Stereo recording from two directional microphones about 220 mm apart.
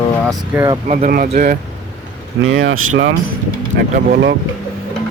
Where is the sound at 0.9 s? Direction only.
35° right (ahead or behind).